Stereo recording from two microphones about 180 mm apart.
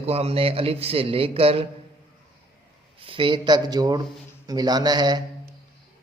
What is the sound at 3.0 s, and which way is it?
A man's voice, 30° right (ahead or behind).